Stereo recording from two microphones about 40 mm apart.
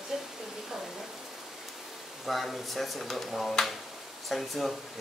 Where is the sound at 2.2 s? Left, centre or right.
Centre.